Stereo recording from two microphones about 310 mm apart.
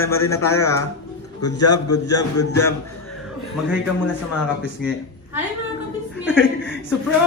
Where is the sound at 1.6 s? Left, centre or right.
Left.